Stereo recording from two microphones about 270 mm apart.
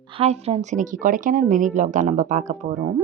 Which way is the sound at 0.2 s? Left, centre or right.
Right.